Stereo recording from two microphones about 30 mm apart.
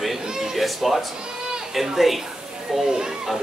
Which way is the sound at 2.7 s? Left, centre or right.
Centre.